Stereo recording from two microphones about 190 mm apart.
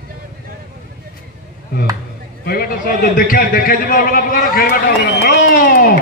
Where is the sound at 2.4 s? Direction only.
55° left (ahead or behind).